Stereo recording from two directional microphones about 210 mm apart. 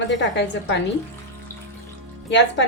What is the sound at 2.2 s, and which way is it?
Speech, 55° left (ahead or behind).